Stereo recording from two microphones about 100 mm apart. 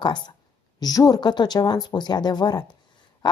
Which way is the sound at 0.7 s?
40° left (ahead or behind).